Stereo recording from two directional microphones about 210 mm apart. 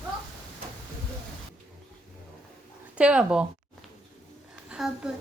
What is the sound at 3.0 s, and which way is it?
Speech, 5° right (ahead or behind).